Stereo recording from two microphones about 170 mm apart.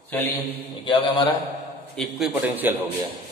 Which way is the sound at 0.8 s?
25° left (ahead or behind).